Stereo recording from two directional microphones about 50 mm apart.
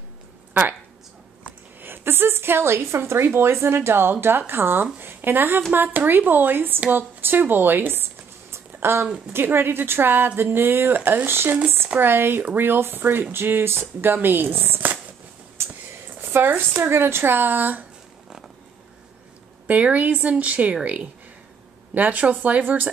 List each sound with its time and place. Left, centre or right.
1.8 s a woman's voice: right
6.9 s zipper: right
9.3 s a woman's voice: right
15.6 s a sound: right
16.2 s a woman's voice: right
19.7 s a woman's voice: right